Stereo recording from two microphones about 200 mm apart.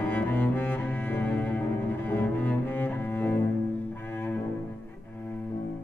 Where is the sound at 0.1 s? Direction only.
10° left (ahead or behind).